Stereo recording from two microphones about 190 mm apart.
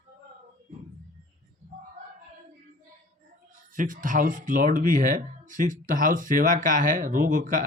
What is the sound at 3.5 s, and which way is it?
Speech, 45° right (ahead or behind).